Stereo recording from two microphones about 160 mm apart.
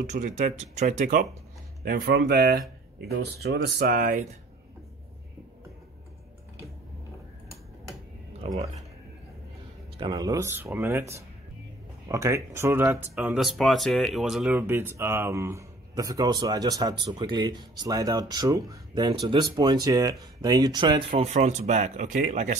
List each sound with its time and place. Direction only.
0.0 s speech: 50° right (ahead or behind)
1.8 s speech: 75° right (ahead or behind)
9.9 s speech: 25° right (ahead or behind)
12.8 s speech: centre (ahead or behind)
14.6 s speech: 15° right (ahead or behind); by 21.3 s 30° right (ahead or behind)
21.3 s speech: 45° right (ahead or behind)